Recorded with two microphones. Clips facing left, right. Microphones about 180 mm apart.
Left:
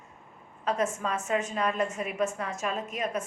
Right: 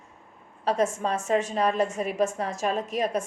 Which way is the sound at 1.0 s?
35° right (ahead or behind).